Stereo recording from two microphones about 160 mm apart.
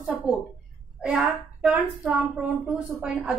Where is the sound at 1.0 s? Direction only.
5° right (ahead or behind).